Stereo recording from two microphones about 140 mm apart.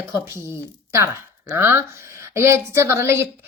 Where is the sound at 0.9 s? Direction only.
20° right (ahead or behind).